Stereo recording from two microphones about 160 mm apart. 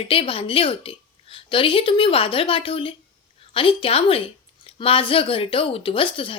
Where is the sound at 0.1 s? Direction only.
35° left (ahead or behind).